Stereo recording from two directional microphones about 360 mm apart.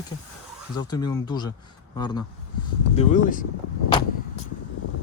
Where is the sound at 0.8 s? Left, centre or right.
Centre.